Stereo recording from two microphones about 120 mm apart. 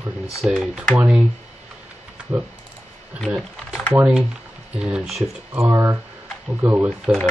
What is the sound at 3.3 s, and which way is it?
Speech, 10° right (ahead or behind).